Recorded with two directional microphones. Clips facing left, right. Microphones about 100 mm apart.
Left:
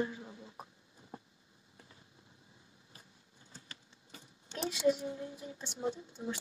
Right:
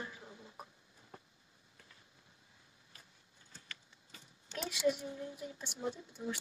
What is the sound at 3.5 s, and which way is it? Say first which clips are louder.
Speech: even; 30° left (ahead or behind).